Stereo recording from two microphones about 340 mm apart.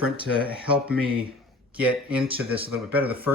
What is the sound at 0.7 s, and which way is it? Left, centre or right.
Speech, centre.